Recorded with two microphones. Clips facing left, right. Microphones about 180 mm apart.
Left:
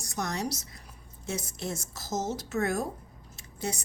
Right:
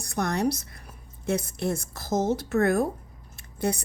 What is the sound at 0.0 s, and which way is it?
A woman's voice, 60° right (ahead or behind).